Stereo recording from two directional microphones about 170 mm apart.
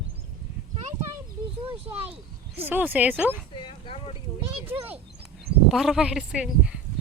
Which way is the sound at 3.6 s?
30° left (ahead or behind).